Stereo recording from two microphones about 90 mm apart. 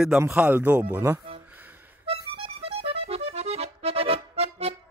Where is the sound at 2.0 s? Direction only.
90° right.